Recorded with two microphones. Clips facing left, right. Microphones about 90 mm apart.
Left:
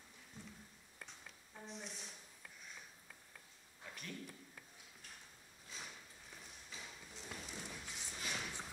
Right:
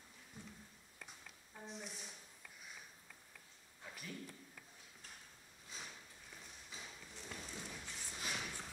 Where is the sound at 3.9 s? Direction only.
5° right (ahead or behind).